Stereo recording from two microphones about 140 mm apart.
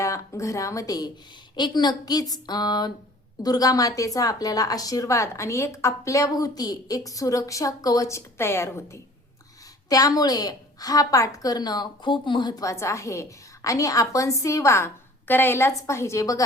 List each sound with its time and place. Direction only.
0.0 s a woman's voice: 20° left (ahead or behind)